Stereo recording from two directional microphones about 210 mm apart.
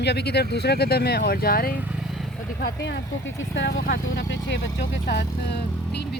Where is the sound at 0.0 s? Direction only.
50° left (ahead or behind).